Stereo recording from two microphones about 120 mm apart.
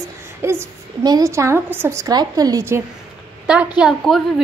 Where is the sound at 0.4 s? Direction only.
20° right (ahead or behind).